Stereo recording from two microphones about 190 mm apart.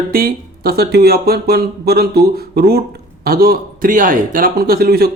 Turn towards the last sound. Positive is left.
turn(degrees=-55)  # may be behind; listen again after turning